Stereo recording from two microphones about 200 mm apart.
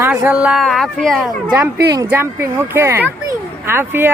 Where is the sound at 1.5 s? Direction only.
15° right (ahead or behind).